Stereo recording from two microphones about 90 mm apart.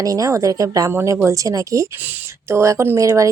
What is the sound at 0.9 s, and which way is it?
Speech, 30° right (ahead or behind).